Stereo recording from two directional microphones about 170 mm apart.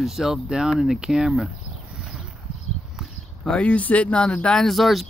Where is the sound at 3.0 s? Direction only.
5° left (ahead or behind).